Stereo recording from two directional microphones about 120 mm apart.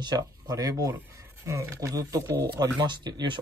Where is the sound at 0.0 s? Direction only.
35° right (ahead or behind).